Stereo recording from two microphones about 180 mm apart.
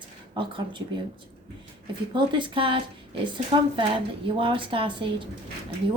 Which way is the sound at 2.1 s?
25° right (ahead or behind).